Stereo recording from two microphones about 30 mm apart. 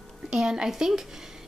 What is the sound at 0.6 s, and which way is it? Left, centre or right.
Speech, centre.